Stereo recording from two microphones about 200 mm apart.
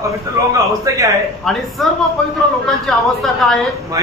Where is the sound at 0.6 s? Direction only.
15° right (ahead or behind).